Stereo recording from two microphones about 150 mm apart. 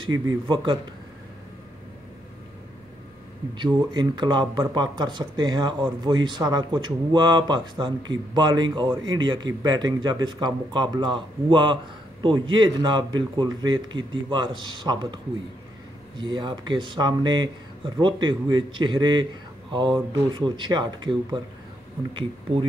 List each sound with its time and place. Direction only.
0.0 s speech: 30° right (ahead or behind)
3.5 s speech: 30° right (ahead or behind)
16.2 s speech: 30° right (ahead or behind)